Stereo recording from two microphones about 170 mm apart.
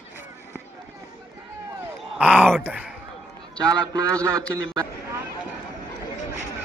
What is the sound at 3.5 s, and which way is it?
Speech, 20° right (ahead or behind).